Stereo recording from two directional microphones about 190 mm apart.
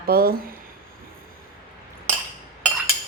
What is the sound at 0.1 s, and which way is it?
Speech, 55° right (ahead or behind).